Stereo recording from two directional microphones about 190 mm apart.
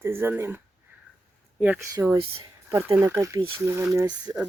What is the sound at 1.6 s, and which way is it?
Speech, 10° right (ahead or behind).